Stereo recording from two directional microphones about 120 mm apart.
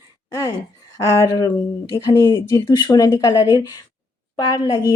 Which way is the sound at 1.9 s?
25° left (ahead or behind).